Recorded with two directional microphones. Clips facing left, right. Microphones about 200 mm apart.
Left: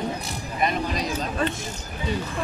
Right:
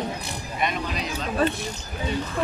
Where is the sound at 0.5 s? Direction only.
40° left (ahead or behind).